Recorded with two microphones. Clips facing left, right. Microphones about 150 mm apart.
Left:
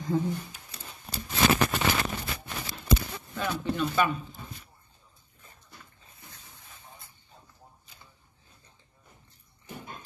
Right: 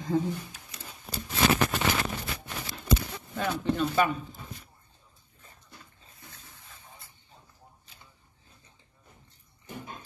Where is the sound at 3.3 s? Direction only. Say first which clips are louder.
Right 2 dB; 35° right (ahead or behind).